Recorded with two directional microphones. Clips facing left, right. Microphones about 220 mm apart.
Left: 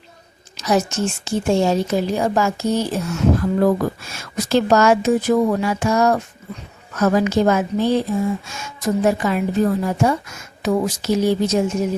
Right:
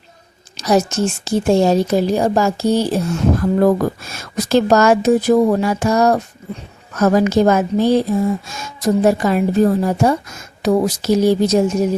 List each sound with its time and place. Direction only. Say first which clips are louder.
0.6 s a woman's voice: right 3 dB; 35° right (ahead or behind)
3.6 s a woman's voice: right 3 dB; 45° right (ahead or behind)